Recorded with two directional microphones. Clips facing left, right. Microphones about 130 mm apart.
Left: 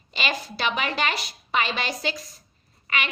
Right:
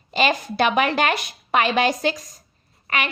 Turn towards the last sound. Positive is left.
turn(degrees=-40)  # may be behind; listen again after turning